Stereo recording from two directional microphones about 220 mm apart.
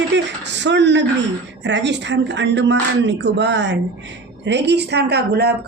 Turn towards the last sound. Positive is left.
turn(degrees=-45)  # may be behind; listen again after turning